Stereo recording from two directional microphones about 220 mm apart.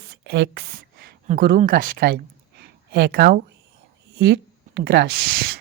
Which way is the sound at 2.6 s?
45° right (ahead or behind).